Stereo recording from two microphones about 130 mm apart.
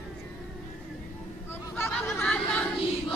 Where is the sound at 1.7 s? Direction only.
15° left (ahead or behind).